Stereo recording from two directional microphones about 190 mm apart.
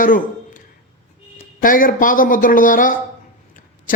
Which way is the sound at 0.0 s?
45° left (ahead or behind).